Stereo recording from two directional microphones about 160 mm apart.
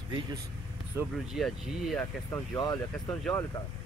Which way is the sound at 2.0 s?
15° left (ahead or behind).